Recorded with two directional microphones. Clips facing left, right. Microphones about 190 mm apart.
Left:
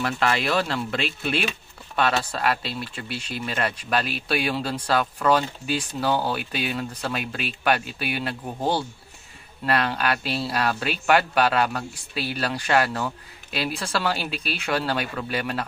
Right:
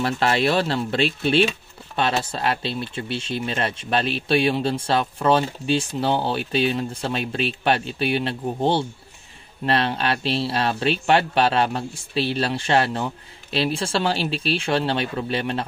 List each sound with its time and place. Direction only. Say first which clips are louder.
0.0 s speech: right 4 dB; 35° right (ahead or behind)